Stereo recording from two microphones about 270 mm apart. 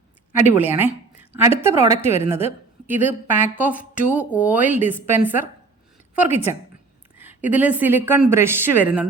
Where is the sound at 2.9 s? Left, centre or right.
Centre.